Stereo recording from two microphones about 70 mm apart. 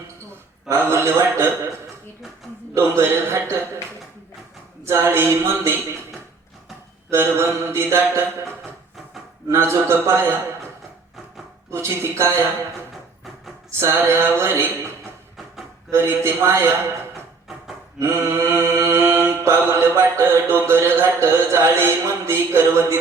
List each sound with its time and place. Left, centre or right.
0.7 s mantra: right
2.7 s mantra: right
4.9 s mantra: right
7.1 s mantra: right
9.5 s mantra: right
11.7 s mantra: right
13.7 s a sound: right
13.9 s mantra: right
15.9 s mantra: right
18.0 s mantra: right